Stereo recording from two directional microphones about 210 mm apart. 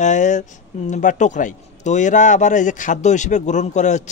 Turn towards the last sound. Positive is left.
turn(degrees=35)  # may be behind; listen again after turning